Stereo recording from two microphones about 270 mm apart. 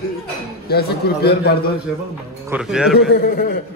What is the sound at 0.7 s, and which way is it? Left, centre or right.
Speech, left.